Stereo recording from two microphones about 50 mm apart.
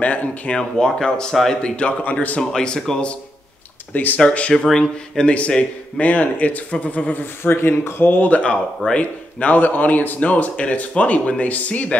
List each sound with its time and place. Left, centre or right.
0.0 s a man's voice: left
0.5 s speech: centre
1.6 s speech: left
2.5 s speech: centre
3.9 s a man's voice: left
4.3 s speech: left
5.3 s a man's voice: left
8.0 s a man's voice: left